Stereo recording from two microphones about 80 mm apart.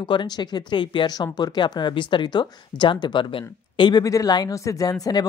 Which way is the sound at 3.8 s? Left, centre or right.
Left.